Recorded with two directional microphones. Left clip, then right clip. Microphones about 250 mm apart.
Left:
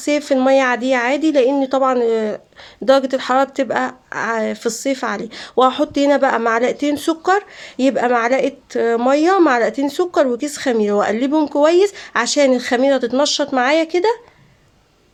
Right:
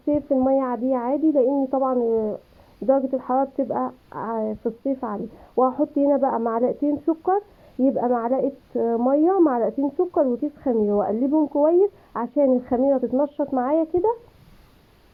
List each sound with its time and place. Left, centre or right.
0.0 s speech: centre
1.5 s speech: left
11.3 s speech: left
11.6 s speech: centre